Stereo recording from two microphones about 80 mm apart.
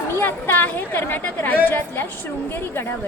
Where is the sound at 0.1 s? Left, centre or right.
Left.